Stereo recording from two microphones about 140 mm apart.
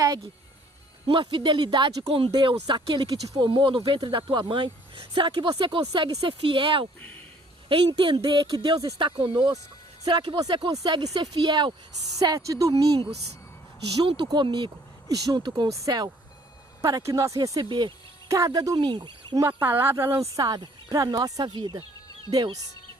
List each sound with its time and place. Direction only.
1.0 s speech: 40° right (ahead or behind)
19.5 s speech: 15° right (ahead or behind)